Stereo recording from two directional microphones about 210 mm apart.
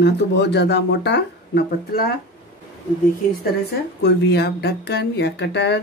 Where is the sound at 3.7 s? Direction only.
50° left (ahead or behind).